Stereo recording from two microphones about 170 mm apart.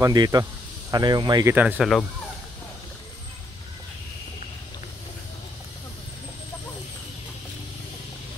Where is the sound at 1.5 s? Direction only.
10° right (ahead or behind).